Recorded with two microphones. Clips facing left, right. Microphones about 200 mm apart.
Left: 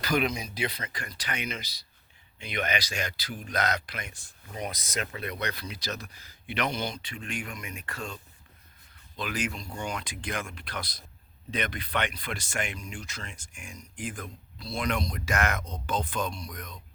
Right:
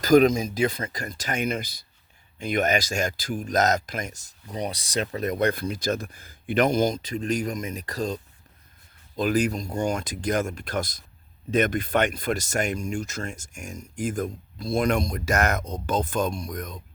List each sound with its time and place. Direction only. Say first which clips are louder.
0.0 s speech: right 11 dB; 45° right (ahead or behind)